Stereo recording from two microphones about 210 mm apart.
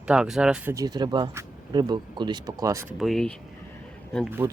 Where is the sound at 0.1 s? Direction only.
5° right (ahead or behind).